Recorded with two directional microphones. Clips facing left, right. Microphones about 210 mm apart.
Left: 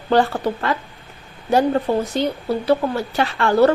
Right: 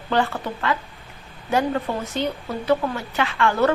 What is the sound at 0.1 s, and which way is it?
Speech, 35° left (ahead or behind).